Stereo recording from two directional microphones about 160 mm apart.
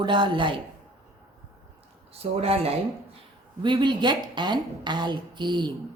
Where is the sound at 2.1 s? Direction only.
40° right (ahead or behind).